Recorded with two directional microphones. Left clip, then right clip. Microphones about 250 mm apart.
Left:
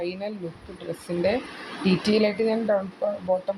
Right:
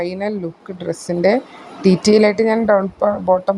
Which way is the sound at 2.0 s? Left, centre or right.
Right.